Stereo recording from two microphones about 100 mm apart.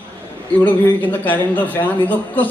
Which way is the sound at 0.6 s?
15° left (ahead or behind).